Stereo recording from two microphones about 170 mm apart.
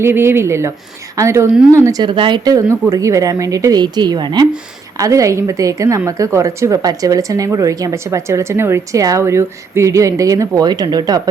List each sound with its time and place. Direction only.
0.0 s a woman's voice: 15° right (ahead or behind)